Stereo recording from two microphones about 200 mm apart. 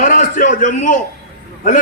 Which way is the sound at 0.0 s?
40° left (ahead or behind).